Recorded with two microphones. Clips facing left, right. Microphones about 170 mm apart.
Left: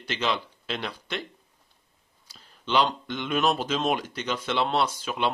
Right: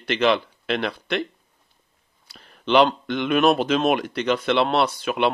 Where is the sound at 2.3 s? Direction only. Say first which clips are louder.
Right 8 dB; 65° right (ahead or behind).